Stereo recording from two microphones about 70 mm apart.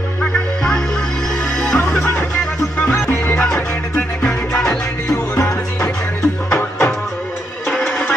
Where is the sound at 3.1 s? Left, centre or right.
Left.